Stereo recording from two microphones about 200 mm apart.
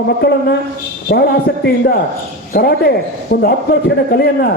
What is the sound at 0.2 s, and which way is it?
A man's voice, 55° left (ahead or behind).